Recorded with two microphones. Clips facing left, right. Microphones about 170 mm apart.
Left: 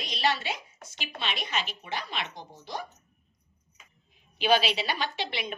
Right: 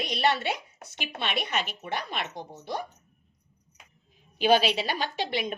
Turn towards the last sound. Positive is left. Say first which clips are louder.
# right 4 dB
turn(degrees=-45)  # may be behind; listen again after turning